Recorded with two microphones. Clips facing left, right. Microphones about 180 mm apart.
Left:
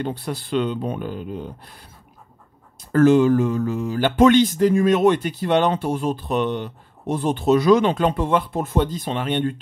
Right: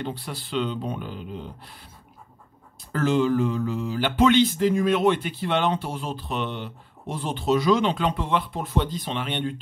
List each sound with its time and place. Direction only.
0.0 s speech: 45° left (ahead or behind)
2.9 s speech: 50° left (ahead or behind)